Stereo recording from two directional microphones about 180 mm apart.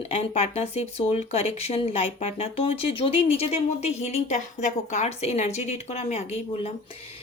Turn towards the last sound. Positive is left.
turn(degrees=35)  # may be behind; listen again after turning